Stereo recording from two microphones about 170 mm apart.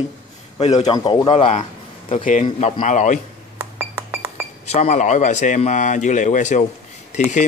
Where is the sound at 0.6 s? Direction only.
40° left (ahead or behind).